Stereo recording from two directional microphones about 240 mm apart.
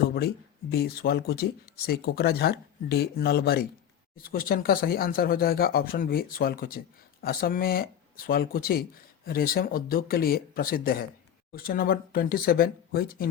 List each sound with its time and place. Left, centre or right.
0.7 s speech: left